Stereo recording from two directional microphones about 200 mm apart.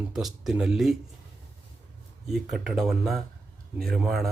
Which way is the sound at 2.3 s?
Centre (ahead or behind).